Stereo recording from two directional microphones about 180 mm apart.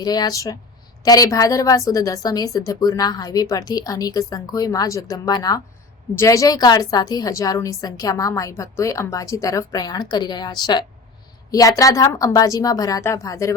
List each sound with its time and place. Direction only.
0.0 s a woman's voice: 20° left (ahead or behind)